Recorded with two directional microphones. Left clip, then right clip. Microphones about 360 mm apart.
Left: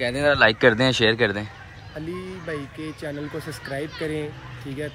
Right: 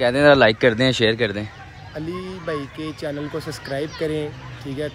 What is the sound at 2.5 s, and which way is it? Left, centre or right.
Speech, centre.